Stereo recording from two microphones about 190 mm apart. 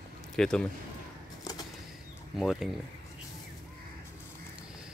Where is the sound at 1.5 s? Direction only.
20° left (ahead or behind).